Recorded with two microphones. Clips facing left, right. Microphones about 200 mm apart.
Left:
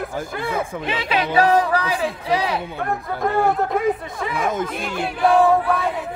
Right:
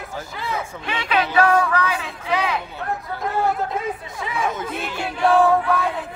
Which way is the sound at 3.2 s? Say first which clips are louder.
Left 3 dB; 55° left (ahead or behind).